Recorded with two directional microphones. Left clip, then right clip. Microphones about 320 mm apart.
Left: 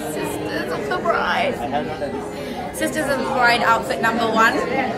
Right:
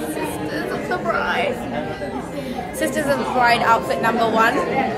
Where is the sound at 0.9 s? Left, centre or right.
Centre.